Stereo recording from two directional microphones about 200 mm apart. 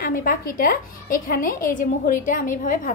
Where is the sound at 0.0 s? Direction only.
45° left (ahead or behind).